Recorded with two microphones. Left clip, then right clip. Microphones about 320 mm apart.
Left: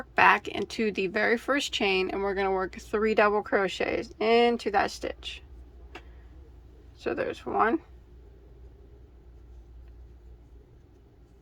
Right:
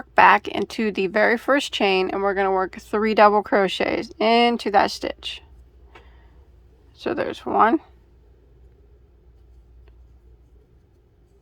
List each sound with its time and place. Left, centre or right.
0.0 s speech: centre
6.9 s speech: centre